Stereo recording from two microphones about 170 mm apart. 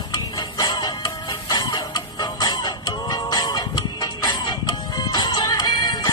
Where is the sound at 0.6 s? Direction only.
25° left (ahead or behind).